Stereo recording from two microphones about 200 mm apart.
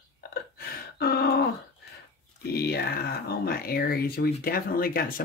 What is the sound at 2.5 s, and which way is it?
Speech, 50° left (ahead or behind).